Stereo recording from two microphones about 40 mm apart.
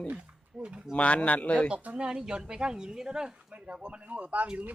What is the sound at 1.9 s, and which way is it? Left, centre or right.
A woman's voice, centre.